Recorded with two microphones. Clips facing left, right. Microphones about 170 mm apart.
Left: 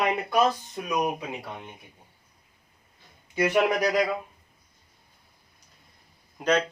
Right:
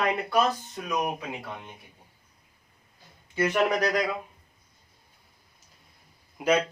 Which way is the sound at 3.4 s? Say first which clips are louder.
Left 1 dB; 10° left (ahead or behind).